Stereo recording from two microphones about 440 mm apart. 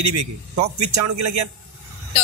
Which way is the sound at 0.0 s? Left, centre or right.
Right.